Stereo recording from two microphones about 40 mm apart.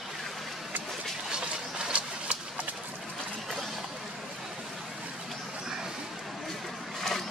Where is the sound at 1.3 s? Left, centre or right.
Right.